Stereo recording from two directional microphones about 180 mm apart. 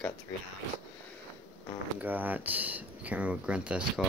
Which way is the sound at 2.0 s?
10° right (ahead or behind).